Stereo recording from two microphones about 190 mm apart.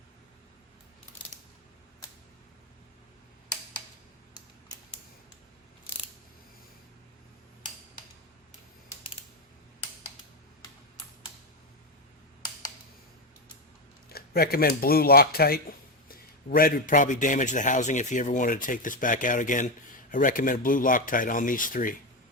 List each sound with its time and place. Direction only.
14.1 s a man's voice: 55° left (ahead or behind)